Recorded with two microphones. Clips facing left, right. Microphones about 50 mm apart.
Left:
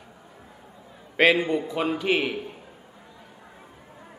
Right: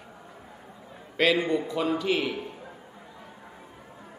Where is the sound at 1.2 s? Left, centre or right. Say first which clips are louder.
Left 3 dB; left.